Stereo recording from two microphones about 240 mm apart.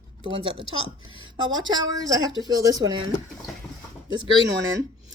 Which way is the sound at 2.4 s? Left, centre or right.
Centre.